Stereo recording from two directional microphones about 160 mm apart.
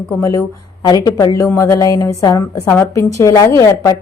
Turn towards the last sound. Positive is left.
turn(degrees=20)  # may be behind; listen again after turning